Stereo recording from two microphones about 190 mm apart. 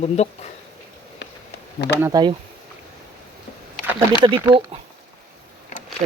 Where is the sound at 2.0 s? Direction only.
15° right (ahead or behind).